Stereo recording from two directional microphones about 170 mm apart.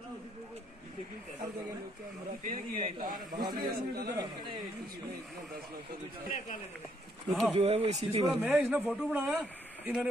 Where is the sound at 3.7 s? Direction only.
65° right (ahead or behind).